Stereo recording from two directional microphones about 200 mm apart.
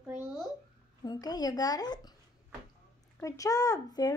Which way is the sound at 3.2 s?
15° left (ahead or behind).